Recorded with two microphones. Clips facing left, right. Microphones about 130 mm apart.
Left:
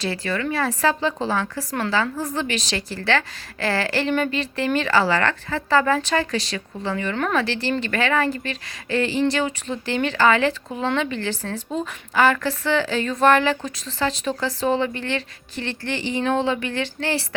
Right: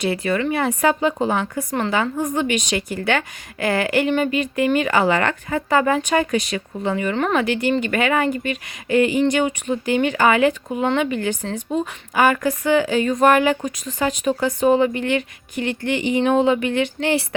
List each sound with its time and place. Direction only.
0.0 s a woman's voice: 20° right (ahead or behind)